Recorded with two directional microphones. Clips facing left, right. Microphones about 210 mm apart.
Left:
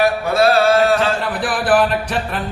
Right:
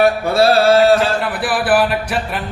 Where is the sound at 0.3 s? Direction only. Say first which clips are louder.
Right 2 dB; 30° right (ahead or behind).